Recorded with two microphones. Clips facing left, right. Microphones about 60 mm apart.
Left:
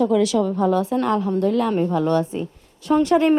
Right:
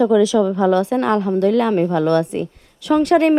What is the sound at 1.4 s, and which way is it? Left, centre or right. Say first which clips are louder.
Speech: right 5 dB; right.